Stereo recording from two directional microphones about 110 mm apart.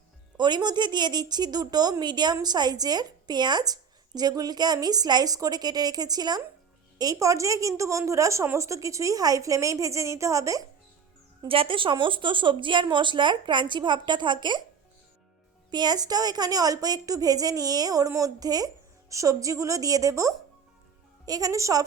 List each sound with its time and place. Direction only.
0.3 s a woman's voice: 40° right (ahead or behind)
11.4 s a woman's voice: 55° right (ahead or behind)
15.7 s a woman's voice: 40° right (ahead or behind)